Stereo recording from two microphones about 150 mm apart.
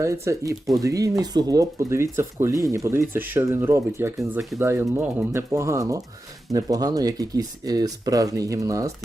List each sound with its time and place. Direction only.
0.0 s speech: 20° right (ahead or behind)